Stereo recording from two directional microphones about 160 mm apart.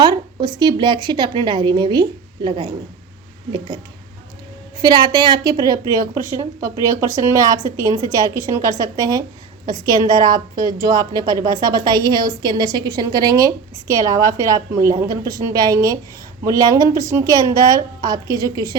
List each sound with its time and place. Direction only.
0.0 s a sound: 25° right (ahead or behind)
0.6 s a woman's voice: 30° right (ahead or behind)
4.8 s a woman's voice: 25° right (ahead or behind)